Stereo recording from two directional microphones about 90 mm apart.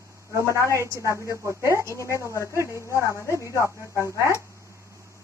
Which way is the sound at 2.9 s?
35° left (ahead or behind).